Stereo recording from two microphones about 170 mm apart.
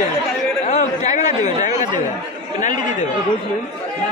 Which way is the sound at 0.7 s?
45° left (ahead or behind).